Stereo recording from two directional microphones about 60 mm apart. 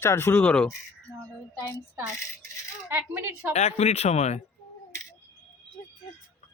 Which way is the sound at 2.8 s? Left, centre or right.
Right.